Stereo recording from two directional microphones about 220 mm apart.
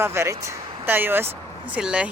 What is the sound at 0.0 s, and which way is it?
Speech, 10° right (ahead or behind).